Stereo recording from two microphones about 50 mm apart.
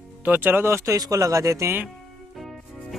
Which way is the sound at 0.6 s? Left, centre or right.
Right.